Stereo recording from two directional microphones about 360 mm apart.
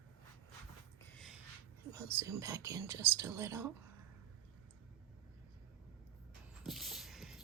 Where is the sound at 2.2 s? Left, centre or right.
Centre.